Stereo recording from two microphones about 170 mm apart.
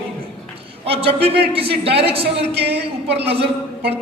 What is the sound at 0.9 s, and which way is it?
A man's voice, 35° right (ahead or behind).